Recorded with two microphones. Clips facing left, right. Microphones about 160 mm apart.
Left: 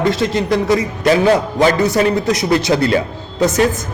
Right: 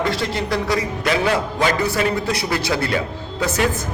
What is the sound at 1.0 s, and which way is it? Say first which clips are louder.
A man's voice: left 8 dB; 40° left (ahead or behind).